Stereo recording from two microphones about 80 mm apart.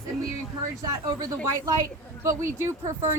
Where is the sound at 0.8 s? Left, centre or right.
Right.